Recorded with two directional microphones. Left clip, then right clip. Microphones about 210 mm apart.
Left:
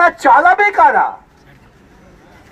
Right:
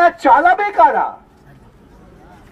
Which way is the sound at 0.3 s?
20° left (ahead or behind).